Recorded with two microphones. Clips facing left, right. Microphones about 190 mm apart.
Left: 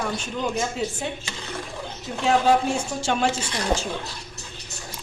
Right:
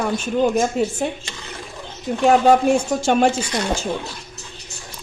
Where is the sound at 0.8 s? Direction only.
50° right (ahead or behind).